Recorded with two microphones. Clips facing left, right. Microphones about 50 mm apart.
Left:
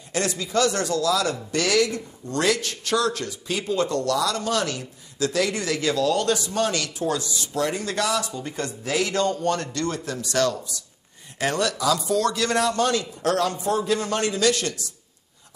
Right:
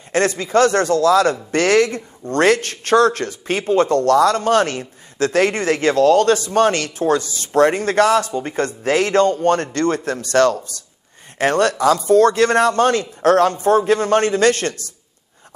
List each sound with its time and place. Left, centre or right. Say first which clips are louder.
0.1 s a man's voice: right 8 dB; right